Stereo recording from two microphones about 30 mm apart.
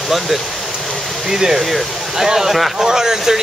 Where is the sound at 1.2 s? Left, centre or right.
Centre.